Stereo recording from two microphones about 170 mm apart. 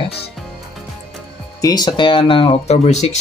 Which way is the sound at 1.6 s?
25° left (ahead or behind).